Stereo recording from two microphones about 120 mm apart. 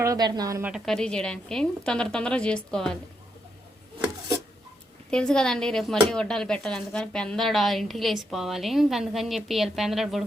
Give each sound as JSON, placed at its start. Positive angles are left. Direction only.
{"t": 0.0, "sound": "a woman's voice", "side_deg": -30}
{"t": 0.9, "sound": "a woman's voice", "side_deg": 5}
{"t": 5.1, "sound": "speech", "side_deg": 5}